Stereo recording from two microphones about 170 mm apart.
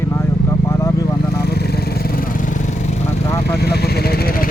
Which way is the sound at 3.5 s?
70° left (ahead or behind).